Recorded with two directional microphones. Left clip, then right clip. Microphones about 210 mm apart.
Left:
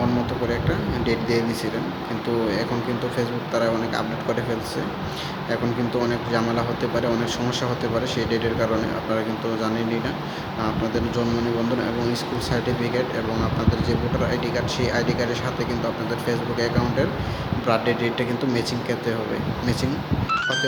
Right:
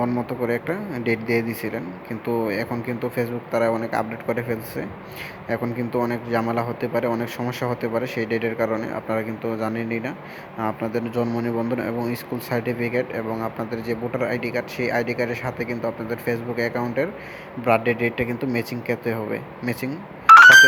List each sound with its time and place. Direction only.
1.0 s speech: 35° right (ahead or behind)
3.2 s speech: 35° right (ahead or behind)
6.0 s speech: 25° right (ahead or behind)
12.5 s speech: 35° right (ahead or behind)